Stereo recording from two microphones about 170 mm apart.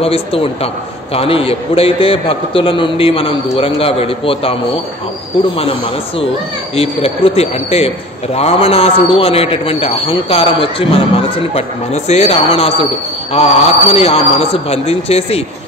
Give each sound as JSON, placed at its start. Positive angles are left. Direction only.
{"t": 0.0, "sound": "a man's voice", "side_deg": 35}